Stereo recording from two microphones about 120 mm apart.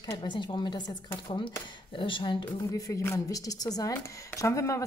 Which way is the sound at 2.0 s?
45° left (ahead or behind).